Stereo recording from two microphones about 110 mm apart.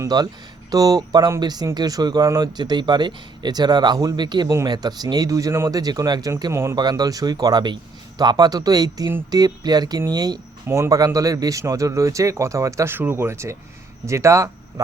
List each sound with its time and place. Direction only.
0.1 s speech: 35° right (ahead or behind)
6.5 s speech: 25° right (ahead or behind)
6.7 s speech: 40° right (ahead or behind)
10.7 s speech: 25° right (ahead or behind)